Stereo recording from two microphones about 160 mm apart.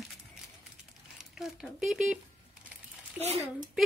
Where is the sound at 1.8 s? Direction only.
5° right (ahead or behind).